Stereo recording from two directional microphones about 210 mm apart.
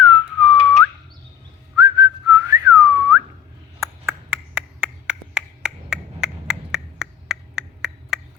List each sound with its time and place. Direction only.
0.0 s whistling: centre (ahead or behind)
1.7 s whistling: 20° right (ahead or behind)
3.8 s finger snapping: 10° right (ahead or behind)